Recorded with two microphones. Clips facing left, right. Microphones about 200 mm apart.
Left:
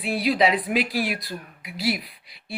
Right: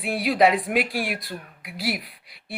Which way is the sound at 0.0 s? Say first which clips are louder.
Right 1 dB; 55° right (ahead or behind).